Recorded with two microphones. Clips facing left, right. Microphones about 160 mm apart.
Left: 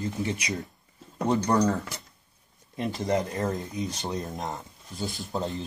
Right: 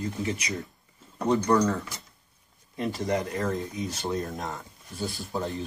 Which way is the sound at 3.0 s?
25° left (ahead or behind).